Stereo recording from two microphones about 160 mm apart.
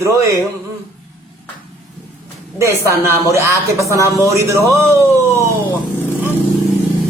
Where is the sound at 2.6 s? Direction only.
20° right (ahead or behind).